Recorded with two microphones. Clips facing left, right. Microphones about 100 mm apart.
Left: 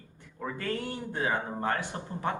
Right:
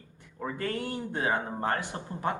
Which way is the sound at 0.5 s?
30° right (ahead or behind).